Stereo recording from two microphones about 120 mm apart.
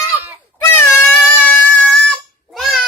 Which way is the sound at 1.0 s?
5° left (ahead or behind).